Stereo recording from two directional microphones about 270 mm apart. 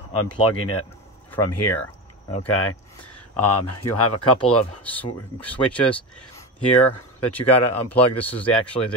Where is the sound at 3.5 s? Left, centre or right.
Left.